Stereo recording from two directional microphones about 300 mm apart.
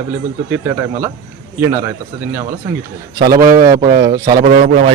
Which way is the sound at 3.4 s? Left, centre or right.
Centre.